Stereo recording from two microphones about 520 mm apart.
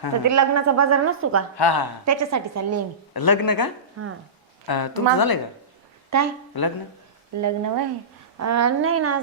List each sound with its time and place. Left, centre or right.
0.3 s a woman's voice: right
1.5 s a woman's voice: left
2.0 s a woman's voice: right
3.1 s speech: left
4.0 s a woman's voice: right
4.6 s a woman's voice: left
6.1 s speech: right
6.5 s a woman's voice: left
7.4 s a woman's voice: right